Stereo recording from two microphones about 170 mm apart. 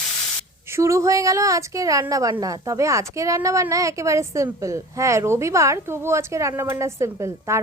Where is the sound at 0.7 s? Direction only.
20° right (ahead or behind).